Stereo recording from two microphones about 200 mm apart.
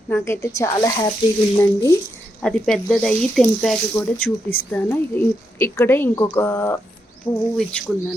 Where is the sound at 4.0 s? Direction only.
15° left (ahead or behind).